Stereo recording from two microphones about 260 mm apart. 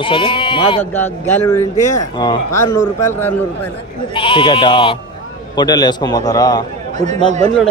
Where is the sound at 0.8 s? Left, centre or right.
Centre.